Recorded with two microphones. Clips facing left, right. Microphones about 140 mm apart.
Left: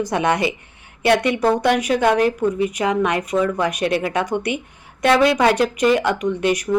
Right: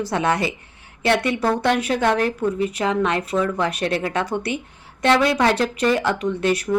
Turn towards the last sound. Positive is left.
turn(degrees=15)  # may be behind; listen again after turning